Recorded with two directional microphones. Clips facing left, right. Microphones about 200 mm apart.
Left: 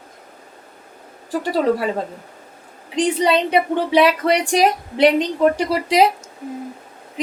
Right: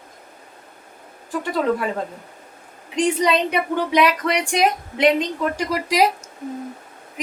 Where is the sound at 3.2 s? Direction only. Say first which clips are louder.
Left 3 dB; 30° left (ahead or behind).